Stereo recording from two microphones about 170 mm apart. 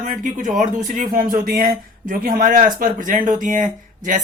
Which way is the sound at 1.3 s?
60° right (ahead or behind).